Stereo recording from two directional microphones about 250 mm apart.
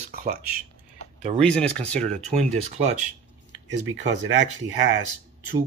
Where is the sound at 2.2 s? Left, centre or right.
Right.